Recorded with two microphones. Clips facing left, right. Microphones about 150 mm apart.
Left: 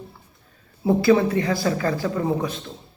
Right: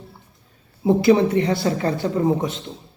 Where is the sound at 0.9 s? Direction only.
20° right (ahead or behind).